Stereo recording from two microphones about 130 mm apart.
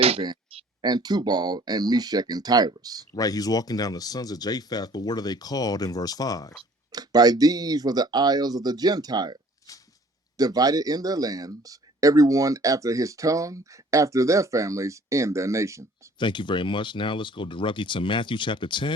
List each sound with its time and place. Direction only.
0.8 s speech: 35° right (ahead or behind)
3.2 s speech: 30° left (ahead or behind)
6.9 s speech: 30° right (ahead or behind)
16.1 s speech: 35° left (ahead or behind)